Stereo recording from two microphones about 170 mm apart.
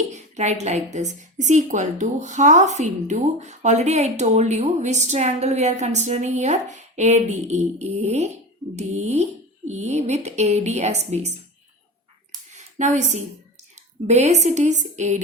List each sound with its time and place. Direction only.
0.1 s a woman's voice: 40° right (ahead or behind)
12.5 s a sound: 45° right (ahead or behind)
13.7 s speech: 40° right (ahead or behind)